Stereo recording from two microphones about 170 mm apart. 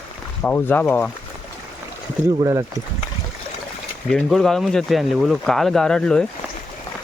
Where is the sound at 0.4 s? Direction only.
10° left (ahead or behind).